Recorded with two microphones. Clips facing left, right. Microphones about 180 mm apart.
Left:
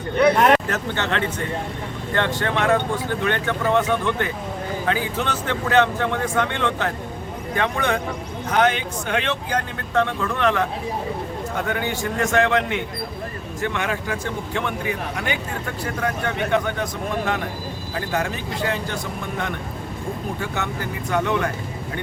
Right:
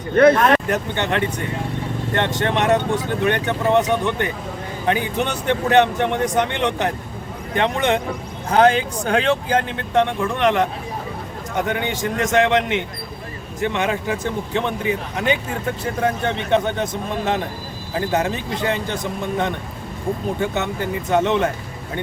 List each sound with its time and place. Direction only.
0.7 s speech: 15° right (ahead or behind)
8.4 s speech: 30° right (ahead or behind)
20.4 s speech: 20° right (ahead or behind)